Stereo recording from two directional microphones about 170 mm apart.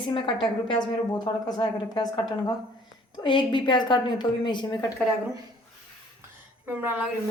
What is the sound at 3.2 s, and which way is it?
A woman's voice, 30° left (ahead or behind).